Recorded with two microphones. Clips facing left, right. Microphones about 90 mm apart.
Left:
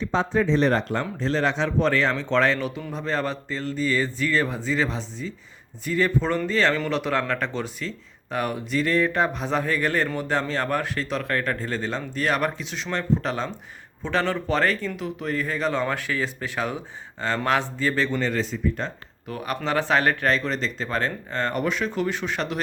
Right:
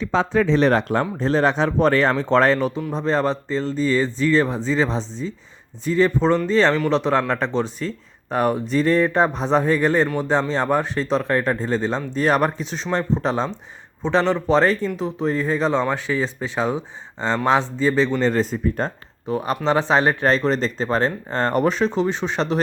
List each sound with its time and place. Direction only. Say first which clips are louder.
0.3 s speech: right 4 dB; 90° right; by 1.0 s 60° right (ahead or behind)
1.2 s speech: right 4 dB; 45° right (ahead or behind); by 18.3 s 20° right (ahead or behind)
18.3 s speech: right 5 dB; 40° right (ahead or behind)
19.3 s speech: right 6 dB; 30° right (ahead or behind)